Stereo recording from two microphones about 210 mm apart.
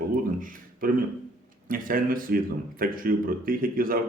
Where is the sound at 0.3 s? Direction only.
40° right (ahead or behind).